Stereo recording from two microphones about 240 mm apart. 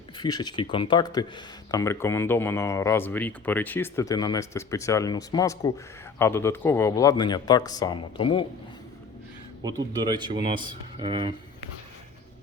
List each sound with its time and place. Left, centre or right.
0.2 s speech: centre
9.6 s speech: centre